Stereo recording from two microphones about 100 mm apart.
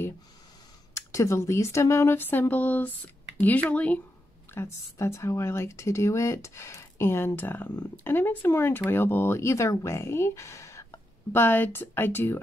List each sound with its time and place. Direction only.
0.9 s speech: 30° left (ahead or behind); by 4.0 s 15° left (ahead or behind)
4.6 s speech: 30° left (ahead or behind)